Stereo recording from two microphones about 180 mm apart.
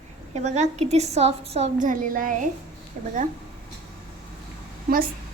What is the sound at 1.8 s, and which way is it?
A child's voice, 45° right (ahead or behind).